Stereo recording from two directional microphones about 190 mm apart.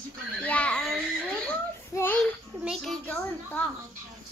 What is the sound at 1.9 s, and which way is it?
Child singing, 10° left (ahead or behind).